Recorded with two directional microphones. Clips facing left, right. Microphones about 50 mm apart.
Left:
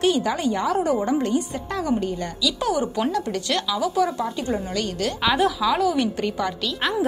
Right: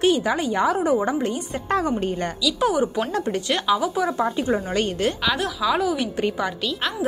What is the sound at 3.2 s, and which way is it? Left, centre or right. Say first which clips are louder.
Speech: right 3 dB; right.